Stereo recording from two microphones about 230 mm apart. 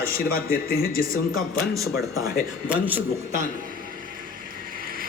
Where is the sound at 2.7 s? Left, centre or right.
Centre.